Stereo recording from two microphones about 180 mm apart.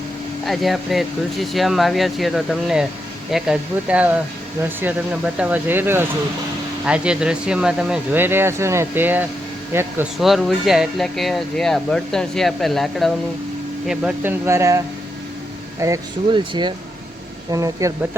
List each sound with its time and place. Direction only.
0.4 s speech: centre (ahead or behind); by 14.8 s 15° right (ahead or behind)
15.8 s speech: 20° right (ahead or behind)